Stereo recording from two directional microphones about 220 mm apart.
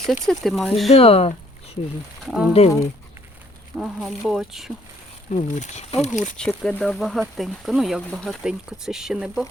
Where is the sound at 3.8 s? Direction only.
Centre (ahead or behind).